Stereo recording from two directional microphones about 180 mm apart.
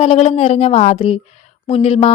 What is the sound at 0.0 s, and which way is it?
A woman's voice, 35° left (ahead or behind).